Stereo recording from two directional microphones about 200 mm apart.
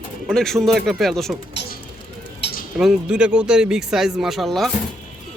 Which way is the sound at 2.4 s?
60° left (ahead or behind).